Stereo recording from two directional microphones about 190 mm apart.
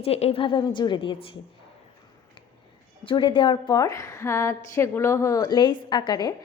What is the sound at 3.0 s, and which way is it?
A woman's voice, 25° left (ahead or behind).